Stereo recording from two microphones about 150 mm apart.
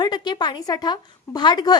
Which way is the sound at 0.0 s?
30° left (ahead or behind).